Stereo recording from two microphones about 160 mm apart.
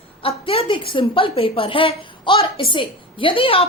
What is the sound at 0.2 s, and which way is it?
A woman's voice, 35° left (ahead or behind).